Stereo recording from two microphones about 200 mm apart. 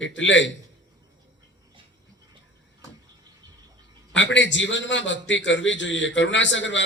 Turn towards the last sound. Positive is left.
turn(degrees=65)  # may be behind; listen again after turning